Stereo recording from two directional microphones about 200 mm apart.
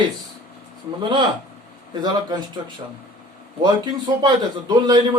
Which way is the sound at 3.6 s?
20° right (ahead or behind).